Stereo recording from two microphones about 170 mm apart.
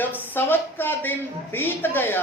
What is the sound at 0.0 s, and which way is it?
A woman's voice, 10° left (ahead or behind).